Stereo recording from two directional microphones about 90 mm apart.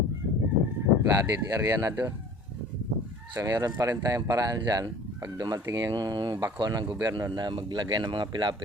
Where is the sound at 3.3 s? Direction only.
40° right (ahead or behind).